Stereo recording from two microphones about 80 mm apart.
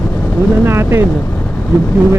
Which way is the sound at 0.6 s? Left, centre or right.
Right.